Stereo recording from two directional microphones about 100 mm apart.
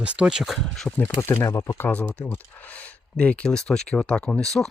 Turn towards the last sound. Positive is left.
turn(degrees=5)  # may be behind; listen again after turning